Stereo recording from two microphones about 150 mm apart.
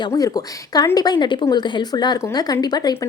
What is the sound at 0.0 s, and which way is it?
Speech, 25° left (ahead or behind).